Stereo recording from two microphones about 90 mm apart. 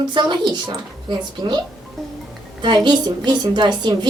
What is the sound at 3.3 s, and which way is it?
Speech, 55° right (ahead or behind).